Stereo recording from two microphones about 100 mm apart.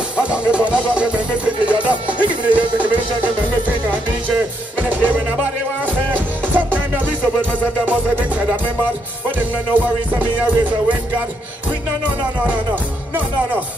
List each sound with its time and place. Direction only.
0.2 s music: 10° right (ahead or behind)
4.7 s music: 15° right (ahead or behind)
6.1 s music: 15° right (ahead or behind)
7.8 s music: 15° right (ahead or behind)
9.8 s music: 15° right (ahead or behind)